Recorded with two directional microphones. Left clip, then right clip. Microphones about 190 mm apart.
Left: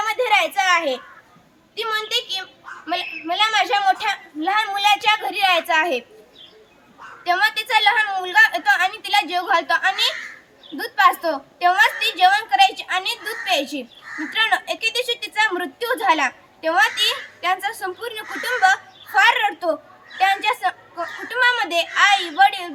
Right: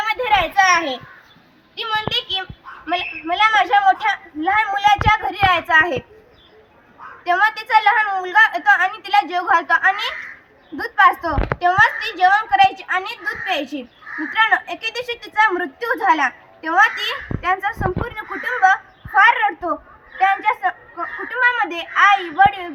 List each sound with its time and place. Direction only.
0.0 s a sound: 25° left (ahead or behind)
0.5 s a child's voice: 45° left (ahead or behind)
1.8 s a child's voice: 20° left (ahead or behind)
7.3 s a child's voice: 25° left (ahead or behind)